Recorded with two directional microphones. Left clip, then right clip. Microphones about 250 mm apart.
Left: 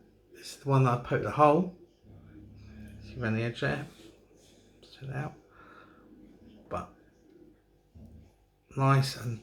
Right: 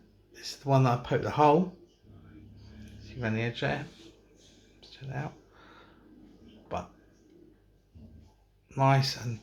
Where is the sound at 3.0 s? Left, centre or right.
Centre.